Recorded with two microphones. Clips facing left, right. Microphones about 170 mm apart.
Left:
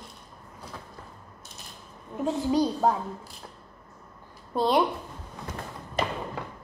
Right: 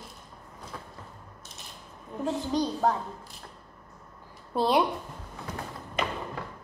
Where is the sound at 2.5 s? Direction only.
10° left (ahead or behind).